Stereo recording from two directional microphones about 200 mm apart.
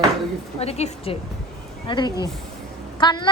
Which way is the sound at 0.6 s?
30° left (ahead or behind).